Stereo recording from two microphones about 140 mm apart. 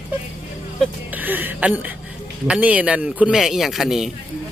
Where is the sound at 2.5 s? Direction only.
10° right (ahead or behind).